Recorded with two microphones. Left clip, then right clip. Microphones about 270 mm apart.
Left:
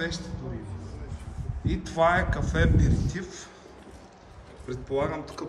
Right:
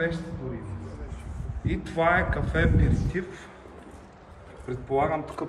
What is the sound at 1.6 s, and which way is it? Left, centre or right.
Speech, centre.